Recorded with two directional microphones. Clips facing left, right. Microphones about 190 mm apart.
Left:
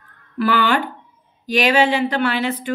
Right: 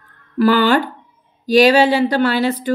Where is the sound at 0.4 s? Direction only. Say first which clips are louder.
Right 5 dB; 40° right (ahead or behind).